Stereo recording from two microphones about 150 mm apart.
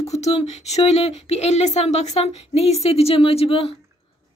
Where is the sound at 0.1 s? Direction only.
45° left (ahead or behind).